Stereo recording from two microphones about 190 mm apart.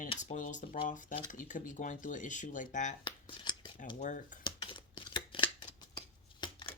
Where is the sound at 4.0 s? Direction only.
40° left (ahead or behind).